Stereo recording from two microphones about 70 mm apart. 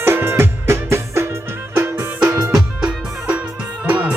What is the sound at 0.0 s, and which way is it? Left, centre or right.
Music, right.